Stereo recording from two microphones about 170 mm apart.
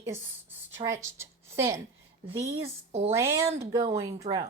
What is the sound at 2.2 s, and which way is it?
Speech, 40° right (ahead or behind).